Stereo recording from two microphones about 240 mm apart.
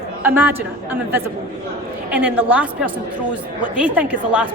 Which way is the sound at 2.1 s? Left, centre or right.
Centre.